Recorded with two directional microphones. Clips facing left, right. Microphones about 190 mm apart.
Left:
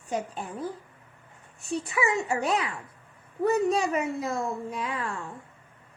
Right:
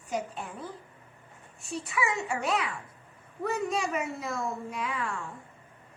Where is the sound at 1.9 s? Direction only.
35° left (ahead or behind).